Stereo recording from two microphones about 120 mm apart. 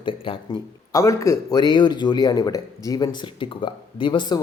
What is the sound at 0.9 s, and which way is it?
Speech, 25° left (ahead or behind).